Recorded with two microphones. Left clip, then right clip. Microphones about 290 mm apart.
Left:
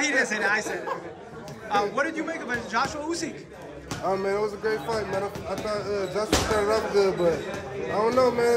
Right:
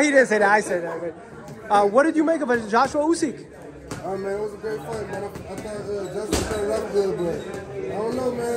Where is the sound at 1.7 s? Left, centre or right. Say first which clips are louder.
Right 8 dB; centre.